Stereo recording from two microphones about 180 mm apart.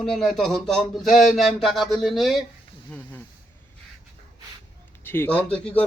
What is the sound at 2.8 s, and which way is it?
Speech, 10° left (ahead or behind).